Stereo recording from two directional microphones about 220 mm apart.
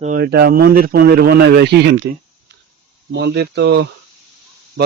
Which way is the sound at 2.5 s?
50° right (ahead or behind).